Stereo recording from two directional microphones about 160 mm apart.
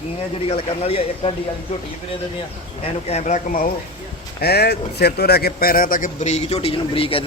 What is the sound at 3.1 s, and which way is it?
Speech, 45° left (ahead or behind).